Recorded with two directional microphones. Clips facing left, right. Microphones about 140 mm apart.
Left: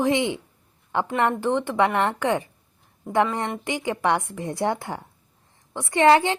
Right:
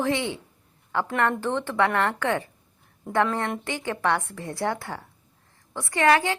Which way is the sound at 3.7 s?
15° left (ahead or behind).